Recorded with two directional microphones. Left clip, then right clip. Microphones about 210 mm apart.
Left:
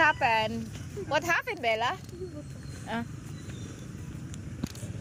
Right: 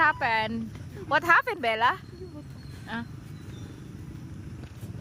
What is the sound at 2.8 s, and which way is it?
Speech, 5° right (ahead or behind).